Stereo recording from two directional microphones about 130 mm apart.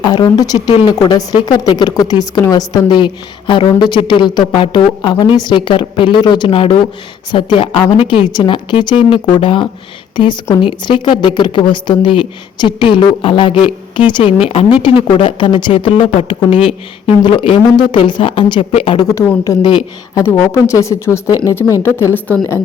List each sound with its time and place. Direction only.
0.0 s a woman's voice: 30° left (ahead or behind)
16.6 s speech: 5° right (ahead or behind)
17.2 s a woman's voice: 40° left (ahead or behind)
19.1 s speech: 20° left (ahead or behind)